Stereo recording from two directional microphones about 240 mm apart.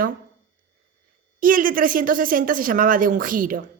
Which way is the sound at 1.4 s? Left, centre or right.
Right.